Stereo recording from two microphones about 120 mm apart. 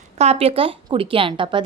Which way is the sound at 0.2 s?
60° right (ahead or behind).